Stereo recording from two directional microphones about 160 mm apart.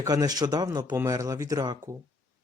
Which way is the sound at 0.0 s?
25° right (ahead or behind).